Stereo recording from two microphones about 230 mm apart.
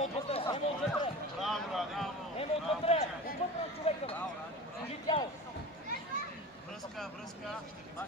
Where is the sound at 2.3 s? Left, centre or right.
Left.